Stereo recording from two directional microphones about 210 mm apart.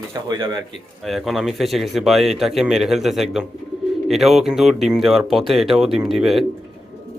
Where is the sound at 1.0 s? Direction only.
Centre (ahead or behind).